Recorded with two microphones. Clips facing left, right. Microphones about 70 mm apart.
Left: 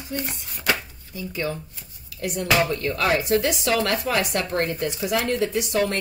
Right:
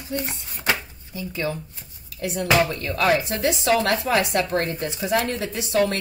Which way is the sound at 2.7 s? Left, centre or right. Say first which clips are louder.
Right 1 dB; left.